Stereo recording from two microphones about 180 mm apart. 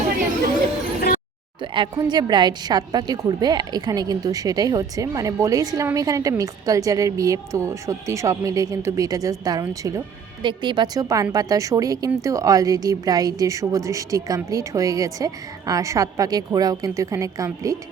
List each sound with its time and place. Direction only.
1.7 s a woman's voice: 25° right (ahead or behind)